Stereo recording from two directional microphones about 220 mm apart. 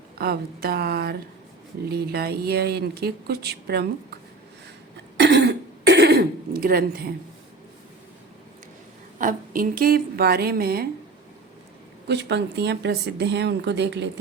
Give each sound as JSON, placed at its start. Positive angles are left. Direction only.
{"t": 0.2, "sound": "speech", "side_deg": -45}
{"t": 5.1, "sound": "throat clearing", "side_deg": -50}
{"t": 9.1, "sound": "speech", "side_deg": -40}
{"t": 12.0, "sound": "speech", "side_deg": -50}